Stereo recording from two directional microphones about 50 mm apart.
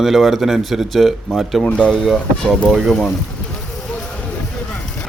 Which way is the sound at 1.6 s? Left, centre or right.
Left.